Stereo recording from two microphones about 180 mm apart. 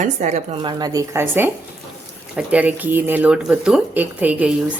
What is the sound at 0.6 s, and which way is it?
Speech, 25° right (ahead or behind).